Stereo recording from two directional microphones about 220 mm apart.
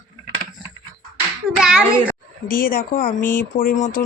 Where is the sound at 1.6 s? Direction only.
5° right (ahead or behind).